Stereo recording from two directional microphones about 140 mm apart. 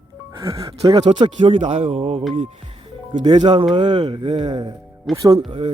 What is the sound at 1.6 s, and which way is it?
Speech, 50° right (ahead or behind).